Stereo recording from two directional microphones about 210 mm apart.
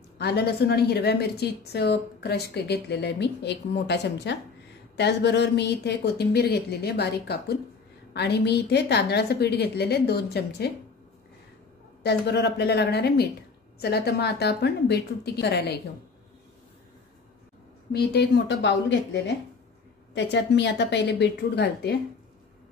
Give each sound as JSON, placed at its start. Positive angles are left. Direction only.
{"t": 0.2, "sound": "a woman's voice", "side_deg": 50}
{"t": 12.0, "sound": "a woman's voice", "side_deg": 50}
{"t": 17.9, "sound": "a woman's voice", "side_deg": 50}